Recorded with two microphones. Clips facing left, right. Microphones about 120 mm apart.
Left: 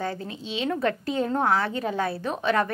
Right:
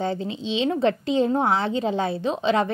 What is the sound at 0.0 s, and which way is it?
A woman's voice, 25° right (ahead or behind).